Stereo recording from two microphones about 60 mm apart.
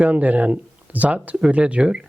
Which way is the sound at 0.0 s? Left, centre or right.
Right.